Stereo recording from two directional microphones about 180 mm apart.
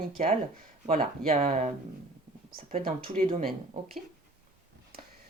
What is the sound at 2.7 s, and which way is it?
Speech, 50° right (ahead or behind).